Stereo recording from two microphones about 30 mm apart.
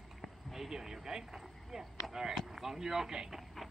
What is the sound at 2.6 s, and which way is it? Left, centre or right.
Speech, centre.